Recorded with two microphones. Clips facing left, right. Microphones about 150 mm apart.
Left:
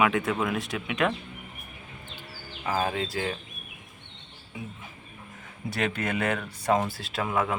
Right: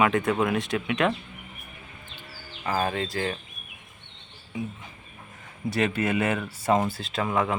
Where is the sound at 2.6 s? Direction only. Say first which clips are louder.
Right 1 dB; 5° left (ahead or behind).